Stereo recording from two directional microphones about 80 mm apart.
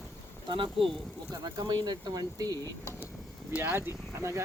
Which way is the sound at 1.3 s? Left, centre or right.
Right.